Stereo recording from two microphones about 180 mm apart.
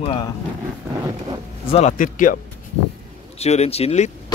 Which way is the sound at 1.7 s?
40° left (ahead or behind).